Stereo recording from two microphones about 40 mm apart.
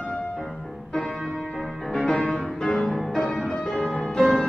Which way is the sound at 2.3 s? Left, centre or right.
Centre.